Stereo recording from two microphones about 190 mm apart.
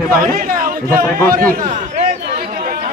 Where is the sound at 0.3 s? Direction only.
50° right (ahead or behind).